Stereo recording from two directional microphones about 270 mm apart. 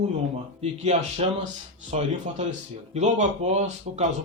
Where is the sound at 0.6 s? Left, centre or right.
Right.